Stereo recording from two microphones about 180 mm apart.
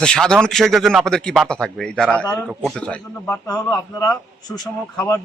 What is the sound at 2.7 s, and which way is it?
Speech, 5° left (ahead or behind).